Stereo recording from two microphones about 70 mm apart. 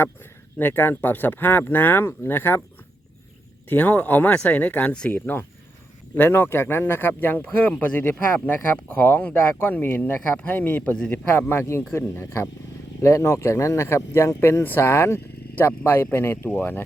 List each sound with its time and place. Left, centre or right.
0.6 s speech: left
3.7 s speech: left